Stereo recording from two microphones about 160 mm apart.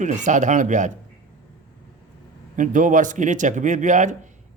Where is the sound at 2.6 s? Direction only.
55° right (ahead or behind).